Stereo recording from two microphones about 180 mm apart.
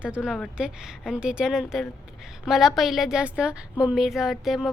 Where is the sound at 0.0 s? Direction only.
5° right (ahead or behind).